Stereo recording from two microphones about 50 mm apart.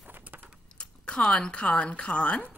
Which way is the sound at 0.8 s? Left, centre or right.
Centre.